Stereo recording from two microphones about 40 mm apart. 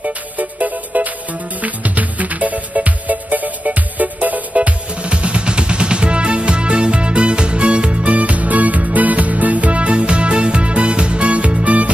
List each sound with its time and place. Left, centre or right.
0.0 s music: right